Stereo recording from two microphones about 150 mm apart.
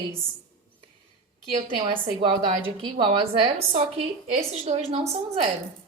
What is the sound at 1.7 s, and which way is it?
A woman's voice, 35° right (ahead or behind).